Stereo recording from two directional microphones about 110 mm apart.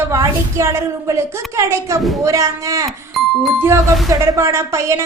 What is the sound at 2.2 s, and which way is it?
Speech, 30° right (ahead or behind).